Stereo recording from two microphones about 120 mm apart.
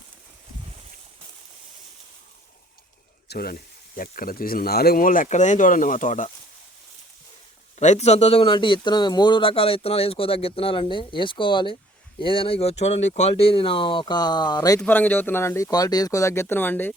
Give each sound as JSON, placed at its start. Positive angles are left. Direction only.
{"t": 5.2, "sound": "speech", "side_deg": 90}
{"t": 7.8, "sound": "a man's voice", "side_deg": 70}
{"t": 14.8, "sound": "speech", "side_deg": 15}